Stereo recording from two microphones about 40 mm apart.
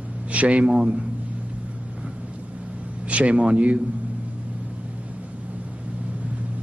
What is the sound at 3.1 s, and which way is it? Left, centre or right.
Speech, right.